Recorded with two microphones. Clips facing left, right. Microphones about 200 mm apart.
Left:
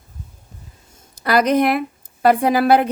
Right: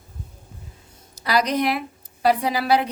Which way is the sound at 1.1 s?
55° left (ahead or behind).